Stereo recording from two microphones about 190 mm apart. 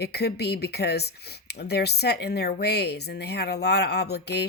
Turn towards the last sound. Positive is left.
turn(degrees=60)  # may be behind; listen again after turning